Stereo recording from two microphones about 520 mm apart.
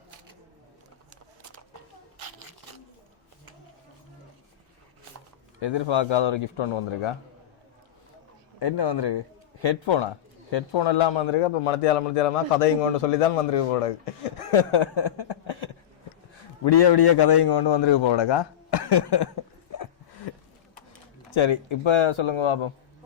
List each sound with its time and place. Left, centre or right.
5.5 s speech: left
8.5 s a man's voice: left
16.6 s a man's voice: left
21.2 s speech: left